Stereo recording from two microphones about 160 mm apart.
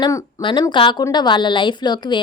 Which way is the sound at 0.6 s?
30° left (ahead or behind).